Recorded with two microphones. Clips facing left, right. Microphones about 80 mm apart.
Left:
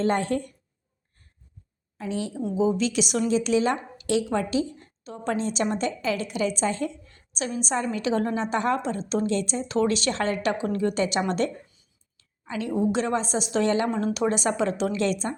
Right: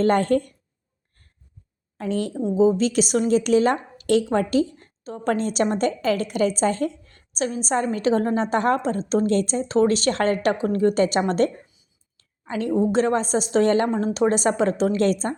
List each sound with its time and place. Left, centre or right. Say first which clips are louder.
0.0 s a woman's voice: right 5 dB; right
2.0 s a woman's voice: right 5 dB; right
2.3 s a woman's voice: right 5 dB; right
2.6 s a woman's voice: right 5 dB; right